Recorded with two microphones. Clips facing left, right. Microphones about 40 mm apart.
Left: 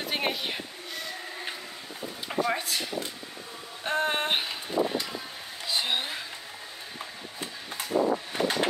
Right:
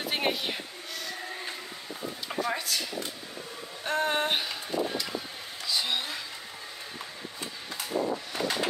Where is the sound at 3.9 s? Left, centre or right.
Centre.